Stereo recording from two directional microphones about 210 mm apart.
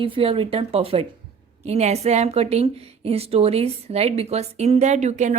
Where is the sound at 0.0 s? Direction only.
25° right (ahead or behind).